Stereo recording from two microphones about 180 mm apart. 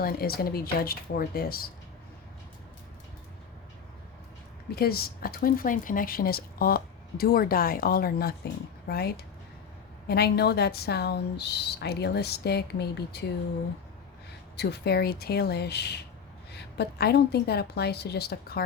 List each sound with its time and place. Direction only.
0.0 s speech: 55° left (ahead or behind)
4.7 s speech: 60° left (ahead or behind)
14.5 s speech: 65° left (ahead or behind)